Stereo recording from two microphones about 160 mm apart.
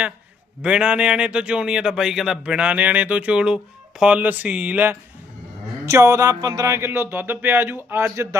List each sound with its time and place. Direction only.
0.6 s speech: 5° right (ahead or behind)